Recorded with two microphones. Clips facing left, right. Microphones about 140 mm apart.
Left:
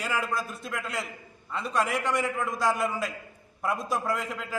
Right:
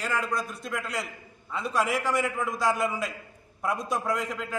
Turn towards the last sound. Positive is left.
turn(degrees=0)  # may be behind; listen again after turning